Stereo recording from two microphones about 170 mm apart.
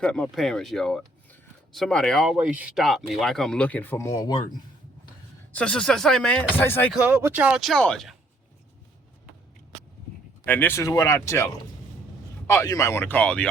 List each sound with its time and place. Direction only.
0.0 s speech: 5° left (ahead or behind); by 4.4 s 25° left (ahead or behind)
5.5 s speech: 5° left (ahead or behind)
6.9 s speech: 10° right (ahead or behind)
10.4 s speech: 10° left (ahead or behind)